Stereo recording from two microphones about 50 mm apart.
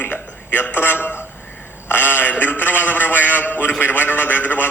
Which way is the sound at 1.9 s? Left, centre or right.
Left.